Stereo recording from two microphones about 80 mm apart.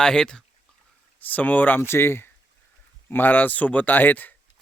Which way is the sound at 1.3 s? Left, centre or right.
Centre.